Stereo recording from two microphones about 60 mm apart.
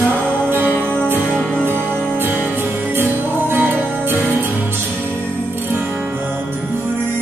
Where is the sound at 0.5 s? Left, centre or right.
Right.